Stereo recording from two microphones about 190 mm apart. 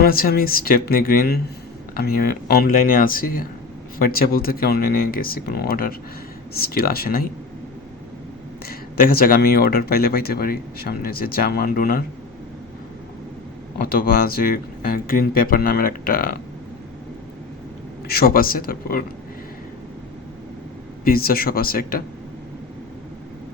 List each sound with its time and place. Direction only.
0.0 s speech: 50° left (ahead or behind)
8.6 s speech: 50° left (ahead or behind)
13.8 s speech: 50° left (ahead or behind)
18.1 s speech: 50° left (ahead or behind)
21.0 s speech: 50° left (ahead or behind)